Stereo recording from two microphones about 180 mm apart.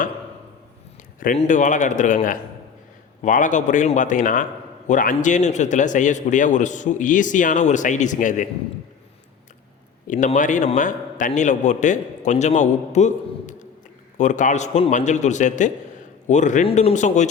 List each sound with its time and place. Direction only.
1.4 s a man's voice: 45° left (ahead or behind)
10.1 s a man's voice: 45° left (ahead or behind)